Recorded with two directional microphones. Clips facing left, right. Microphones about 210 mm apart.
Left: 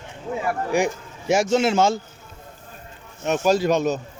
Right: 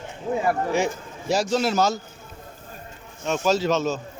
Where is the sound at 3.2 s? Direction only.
15° left (ahead or behind).